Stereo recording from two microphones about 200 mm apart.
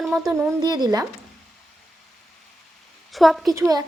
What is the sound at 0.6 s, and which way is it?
Speech, 20° right (ahead or behind).